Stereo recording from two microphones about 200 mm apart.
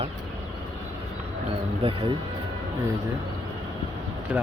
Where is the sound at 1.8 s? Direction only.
25° right (ahead or behind).